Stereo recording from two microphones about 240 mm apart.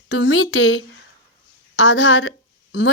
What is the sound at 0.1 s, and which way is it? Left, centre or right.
Speech, left.